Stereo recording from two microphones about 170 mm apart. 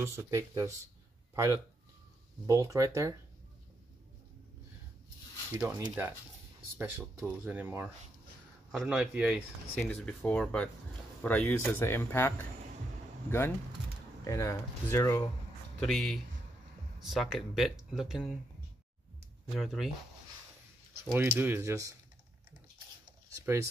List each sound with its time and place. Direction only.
0.0 s speech: 15° right (ahead or behind)
5.6 s speech: 20° right (ahead or behind); by 9.4 s 5° right (ahead or behind)
9.8 s speech: 5° left (ahead or behind)
14.2 s speech: 15° left (ahead or behind)
15.8 s speech: centre (ahead or behind)
19.5 s speech: centre (ahead or behind)
21.0 s speech: 15° right (ahead or behind)
23.3 s speech: 15° right (ahead or behind)